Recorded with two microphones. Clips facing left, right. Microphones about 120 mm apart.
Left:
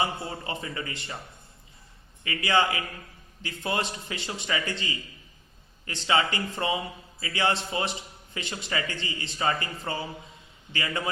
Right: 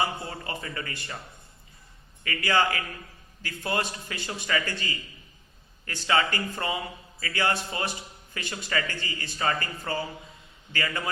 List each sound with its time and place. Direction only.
0.0 s a man's voice: 25° left (ahead or behind)
2.2 s a man's voice: 20° left (ahead or behind)